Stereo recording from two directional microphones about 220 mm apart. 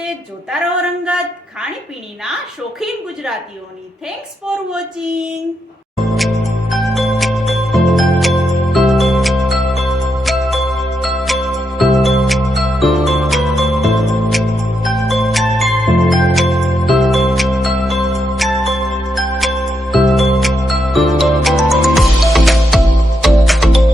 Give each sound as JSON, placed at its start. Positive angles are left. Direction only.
{"t": 6.0, "sound": "music", "side_deg": 0}